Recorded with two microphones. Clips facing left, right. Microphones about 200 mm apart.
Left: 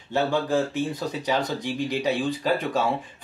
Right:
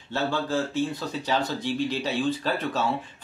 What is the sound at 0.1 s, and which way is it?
Speech, 15° left (ahead or behind).